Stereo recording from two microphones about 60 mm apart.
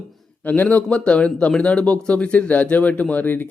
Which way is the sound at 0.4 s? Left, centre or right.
Left.